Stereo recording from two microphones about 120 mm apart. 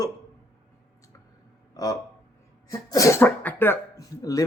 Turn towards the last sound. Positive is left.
turn(degrees=30)  # may be behind; listen again after turning